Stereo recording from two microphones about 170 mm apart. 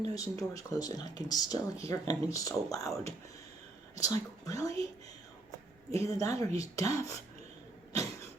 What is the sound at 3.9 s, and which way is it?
Speech, 20° left (ahead or behind).